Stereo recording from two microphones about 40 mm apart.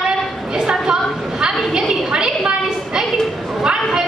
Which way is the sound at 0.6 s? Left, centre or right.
Centre.